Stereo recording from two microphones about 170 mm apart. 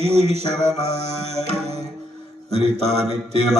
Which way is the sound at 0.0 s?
40° right (ahead or behind).